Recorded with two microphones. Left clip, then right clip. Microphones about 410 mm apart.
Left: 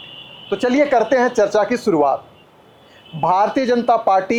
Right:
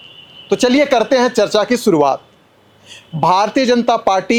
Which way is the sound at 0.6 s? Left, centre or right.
Right.